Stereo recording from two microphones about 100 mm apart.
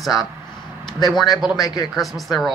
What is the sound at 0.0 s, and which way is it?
Speech, centre (ahead or behind).